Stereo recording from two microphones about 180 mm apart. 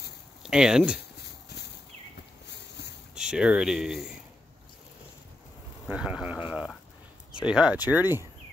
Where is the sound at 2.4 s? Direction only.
70° left (ahead or behind).